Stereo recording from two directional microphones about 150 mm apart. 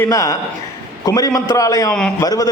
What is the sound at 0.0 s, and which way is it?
A man's voice, 20° left (ahead or behind).